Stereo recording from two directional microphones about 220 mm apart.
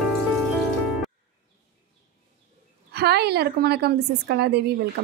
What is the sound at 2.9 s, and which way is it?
A woman's voice, 45° right (ahead or behind).